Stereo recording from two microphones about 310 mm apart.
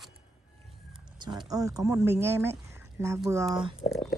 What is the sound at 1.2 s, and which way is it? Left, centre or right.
Speech, centre.